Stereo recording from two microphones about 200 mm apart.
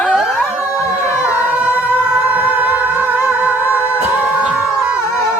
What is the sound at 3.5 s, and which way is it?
Music, 10° left (ahead or behind).